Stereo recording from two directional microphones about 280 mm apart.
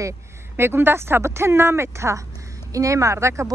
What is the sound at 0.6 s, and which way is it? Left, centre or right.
Speech, centre.